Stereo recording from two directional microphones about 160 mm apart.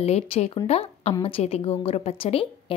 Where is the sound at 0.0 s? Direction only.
40° left (ahead or behind).